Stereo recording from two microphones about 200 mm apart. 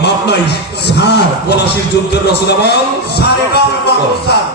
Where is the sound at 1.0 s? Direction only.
55° left (ahead or behind).